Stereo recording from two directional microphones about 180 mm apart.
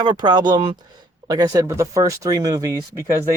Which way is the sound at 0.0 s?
25° right (ahead or behind).